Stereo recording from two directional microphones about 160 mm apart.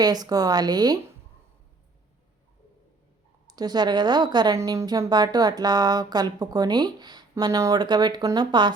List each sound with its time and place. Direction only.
0.0 s speech: 25° right (ahead or behind)
3.4 s speech: 25° right (ahead or behind)